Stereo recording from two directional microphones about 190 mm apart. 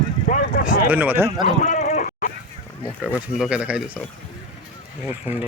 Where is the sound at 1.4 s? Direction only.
40° left (ahead or behind).